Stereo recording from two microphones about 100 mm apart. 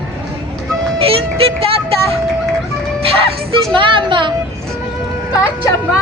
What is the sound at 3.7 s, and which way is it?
Speech, 55° right (ahead or behind).